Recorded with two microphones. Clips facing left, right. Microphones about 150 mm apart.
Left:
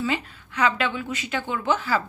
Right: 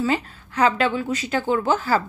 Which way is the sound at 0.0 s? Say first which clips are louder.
Right 4 dB; 40° right (ahead or behind).